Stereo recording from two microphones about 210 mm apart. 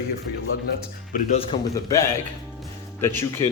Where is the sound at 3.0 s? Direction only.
10° left (ahead or behind).